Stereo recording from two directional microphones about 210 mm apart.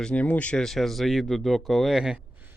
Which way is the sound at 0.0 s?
5° left (ahead or behind).